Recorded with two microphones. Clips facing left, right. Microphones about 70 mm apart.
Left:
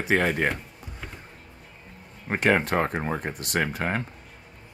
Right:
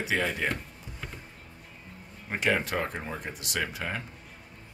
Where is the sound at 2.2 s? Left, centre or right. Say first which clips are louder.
Left 5 dB; left.